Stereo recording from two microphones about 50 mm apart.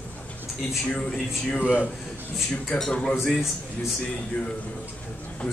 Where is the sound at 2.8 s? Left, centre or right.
Centre.